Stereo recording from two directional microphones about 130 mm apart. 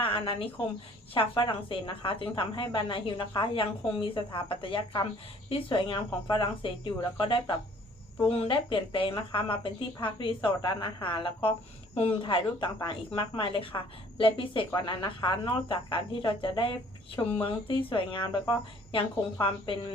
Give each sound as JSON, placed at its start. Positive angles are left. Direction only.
{"t": 0.0, "sound": "a woman's voice", "side_deg": 45}